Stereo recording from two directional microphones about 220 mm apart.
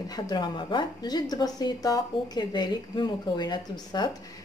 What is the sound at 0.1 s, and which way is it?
A woman's voice, 20° left (ahead or behind).